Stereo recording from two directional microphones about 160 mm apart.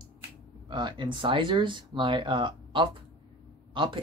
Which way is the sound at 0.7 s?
30° right (ahead or behind).